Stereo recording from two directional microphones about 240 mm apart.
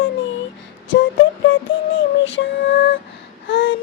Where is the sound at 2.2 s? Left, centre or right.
Left.